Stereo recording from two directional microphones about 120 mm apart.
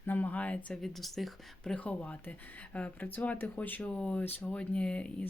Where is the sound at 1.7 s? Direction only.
10° left (ahead or behind).